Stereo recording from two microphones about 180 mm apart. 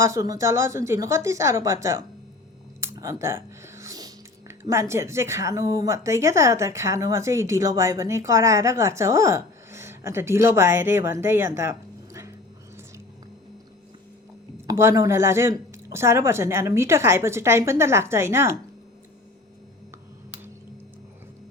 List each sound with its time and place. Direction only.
0.0 s speech: 20° right (ahead or behind)
14.7 s speech: 15° right (ahead or behind)